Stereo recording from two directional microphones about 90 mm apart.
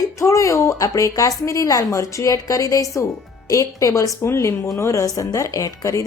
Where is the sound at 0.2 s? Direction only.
35° left (ahead or behind).